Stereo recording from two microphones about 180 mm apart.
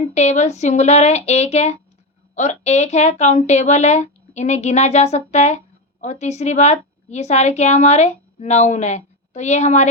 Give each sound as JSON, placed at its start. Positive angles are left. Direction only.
{"t": 0.1, "sound": "a woman's voice", "side_deg": 40}